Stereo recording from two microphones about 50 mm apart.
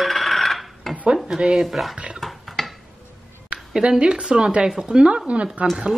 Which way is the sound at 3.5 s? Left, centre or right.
Right.